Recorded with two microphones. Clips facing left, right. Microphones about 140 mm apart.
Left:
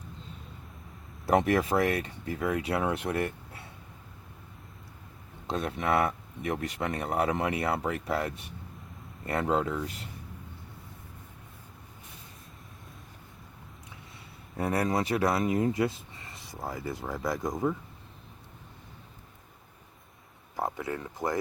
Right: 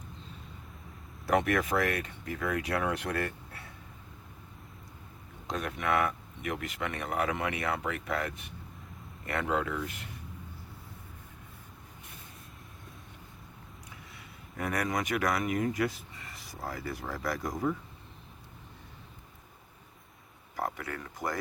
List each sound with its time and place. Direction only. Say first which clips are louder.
1.3 s speech: left 3 dB; 30° left (ahead or behind)
5.5 s speech: left 3 dB; 30° left (ahead or behind)
14.5 s speech: left 4 dB; 30° left (ahead or behind)
20.6 s speech: left 3 dB; 20° left (ahead or behind)